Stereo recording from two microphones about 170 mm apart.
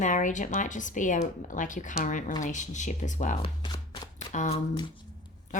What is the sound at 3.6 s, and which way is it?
Chopping, 25° left (ahead or behind).